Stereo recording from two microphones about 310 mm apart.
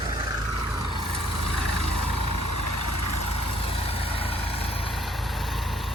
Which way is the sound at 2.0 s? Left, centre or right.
Left.